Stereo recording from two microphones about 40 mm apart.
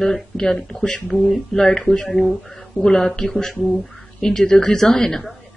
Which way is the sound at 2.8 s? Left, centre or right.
Centre.